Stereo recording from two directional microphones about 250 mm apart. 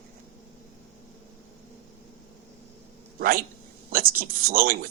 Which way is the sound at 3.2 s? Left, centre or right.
Right.